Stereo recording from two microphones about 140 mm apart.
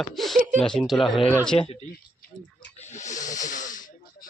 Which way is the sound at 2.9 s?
60° left (ahead or behind).